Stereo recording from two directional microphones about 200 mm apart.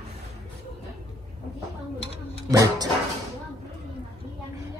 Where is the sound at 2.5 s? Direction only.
15° right (ahead or behind).